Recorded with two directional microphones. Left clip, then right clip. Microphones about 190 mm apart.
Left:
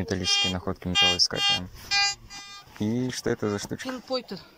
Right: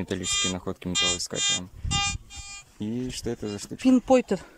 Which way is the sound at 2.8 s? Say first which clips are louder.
Left 4 dB; 10° right (ahead or behind).